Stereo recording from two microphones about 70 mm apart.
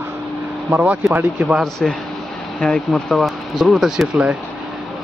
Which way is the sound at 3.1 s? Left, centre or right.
Centre.